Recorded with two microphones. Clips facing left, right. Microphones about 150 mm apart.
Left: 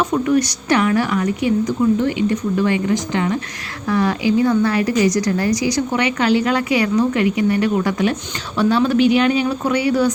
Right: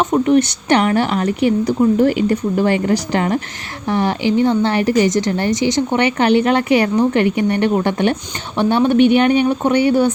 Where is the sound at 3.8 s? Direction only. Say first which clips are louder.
Right 1 dB; 25° right (ahead or behind).